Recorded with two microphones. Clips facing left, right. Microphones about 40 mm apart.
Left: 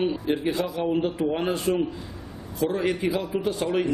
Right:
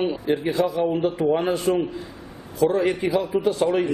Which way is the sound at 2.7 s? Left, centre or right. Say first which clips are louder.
Right 2 dB; centre.